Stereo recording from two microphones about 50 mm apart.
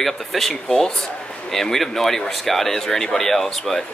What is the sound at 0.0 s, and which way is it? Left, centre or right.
Speech, centre.